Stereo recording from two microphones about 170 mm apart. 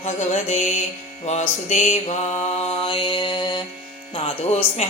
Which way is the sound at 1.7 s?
45° left (ahead or behind).